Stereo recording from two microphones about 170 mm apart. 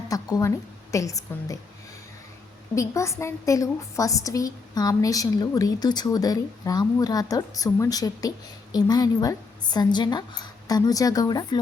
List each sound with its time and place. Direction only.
0.1 s a woman's voice: 20° left (ahead or behind)
2.7 s a woman's voice: 15° left (ahead or behind)